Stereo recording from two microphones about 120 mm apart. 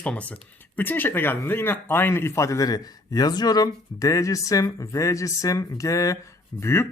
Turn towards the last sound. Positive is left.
turn(degrees=20)  # may be behind; listen again after turning